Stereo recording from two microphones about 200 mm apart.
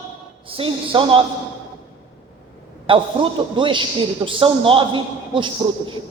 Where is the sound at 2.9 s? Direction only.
25° right (ahead or behind).